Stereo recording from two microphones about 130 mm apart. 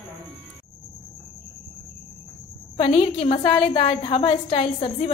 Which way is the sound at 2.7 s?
45° left (ahead or behind).